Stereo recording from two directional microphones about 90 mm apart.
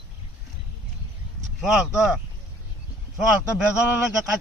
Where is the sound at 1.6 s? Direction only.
Centre (ahead or behind).